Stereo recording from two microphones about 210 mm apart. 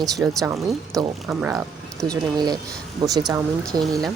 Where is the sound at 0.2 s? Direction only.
10° right (ahead or behind).